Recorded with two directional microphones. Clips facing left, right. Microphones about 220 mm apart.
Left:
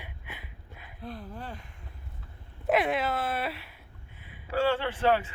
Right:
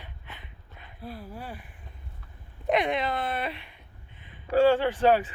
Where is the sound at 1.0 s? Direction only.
5° right (ahead or behind).